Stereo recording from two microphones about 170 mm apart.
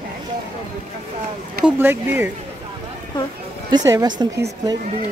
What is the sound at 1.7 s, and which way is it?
Speech, 10° right (ahead or behind).